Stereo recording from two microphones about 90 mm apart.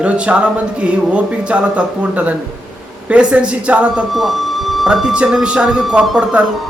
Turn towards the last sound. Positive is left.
turn(degrees=-10)  # may be behind; listen again after turning